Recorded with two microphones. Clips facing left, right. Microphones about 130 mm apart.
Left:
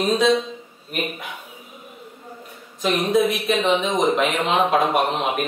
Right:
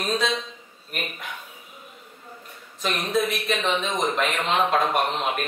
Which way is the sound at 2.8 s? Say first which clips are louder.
Left 6 dB; centre (ahead or behind).